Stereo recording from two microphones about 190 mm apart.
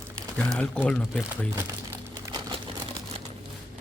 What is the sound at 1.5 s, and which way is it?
Crumpling, 15° right (ahead or behind).